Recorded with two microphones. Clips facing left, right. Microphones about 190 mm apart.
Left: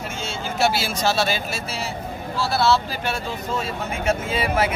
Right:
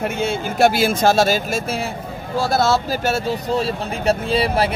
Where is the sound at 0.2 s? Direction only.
50° right (ahead or behind).